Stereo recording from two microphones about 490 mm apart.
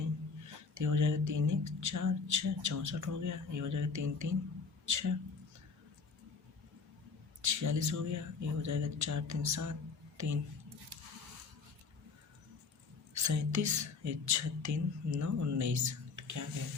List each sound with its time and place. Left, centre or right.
0.4 s speech: right
7.4 s speech: right
13.1 s speech: right